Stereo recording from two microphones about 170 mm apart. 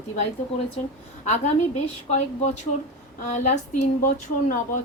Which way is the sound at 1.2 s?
40° left (ahead or behind).